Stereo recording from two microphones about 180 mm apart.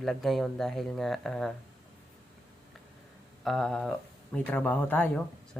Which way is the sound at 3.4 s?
Centre (ahead or behind).